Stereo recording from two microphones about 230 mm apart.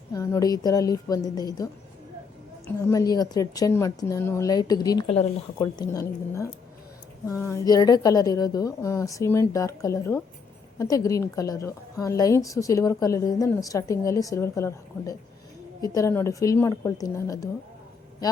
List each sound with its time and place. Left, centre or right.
0.1 s a woman's voice: centre
7.3 s a woman's voice: centre